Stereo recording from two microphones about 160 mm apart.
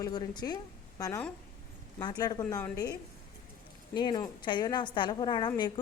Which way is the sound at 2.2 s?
20° left (ahead or behind).